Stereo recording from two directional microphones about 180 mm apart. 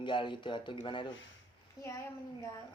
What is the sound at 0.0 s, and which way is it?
Speech, 25° left (ahead or behind).